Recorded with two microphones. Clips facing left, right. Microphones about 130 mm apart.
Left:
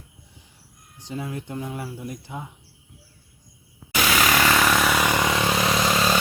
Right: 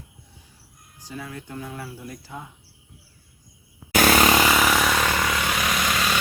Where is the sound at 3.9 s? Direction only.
45° right (ahead or behind).